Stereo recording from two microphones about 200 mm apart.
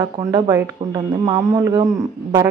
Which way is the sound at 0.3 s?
20° right (ahead or behind).